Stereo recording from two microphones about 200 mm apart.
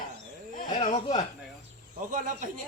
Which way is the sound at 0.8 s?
25° left (ahead or behind).